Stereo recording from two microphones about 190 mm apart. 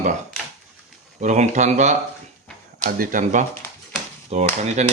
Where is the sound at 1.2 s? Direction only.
40° right (ahead or behind).